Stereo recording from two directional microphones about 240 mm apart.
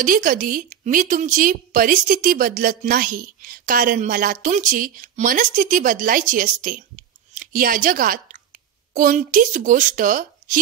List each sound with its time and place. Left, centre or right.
0.0 s speech: right